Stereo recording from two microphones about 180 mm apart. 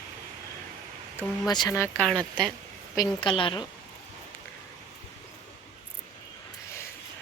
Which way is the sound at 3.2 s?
30° left (ahead or behind).